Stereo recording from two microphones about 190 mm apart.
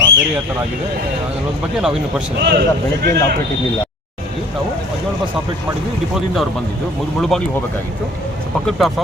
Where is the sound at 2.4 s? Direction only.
60° right (ahead or behind).